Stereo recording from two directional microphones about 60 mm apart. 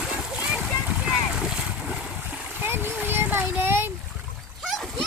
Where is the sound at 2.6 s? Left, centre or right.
Right.